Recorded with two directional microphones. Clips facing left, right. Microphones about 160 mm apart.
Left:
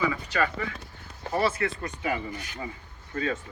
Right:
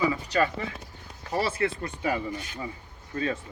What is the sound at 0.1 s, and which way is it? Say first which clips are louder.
Speech: right 2 dB; 30° right (ahead or behind).